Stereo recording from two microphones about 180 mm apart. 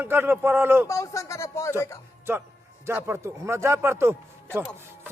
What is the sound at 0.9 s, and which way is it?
Speech, 15° left (ahead or behind).